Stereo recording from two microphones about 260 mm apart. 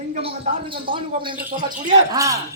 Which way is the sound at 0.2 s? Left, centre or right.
Right.